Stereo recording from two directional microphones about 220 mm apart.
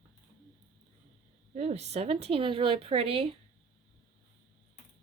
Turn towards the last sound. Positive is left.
turn(degrees=-25)  # may be behind; listen again after turning